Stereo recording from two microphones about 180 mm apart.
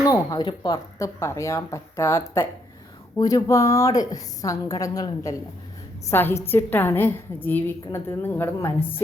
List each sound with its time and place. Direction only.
0.0 s a woman's voice: 20° left (ahead or behind)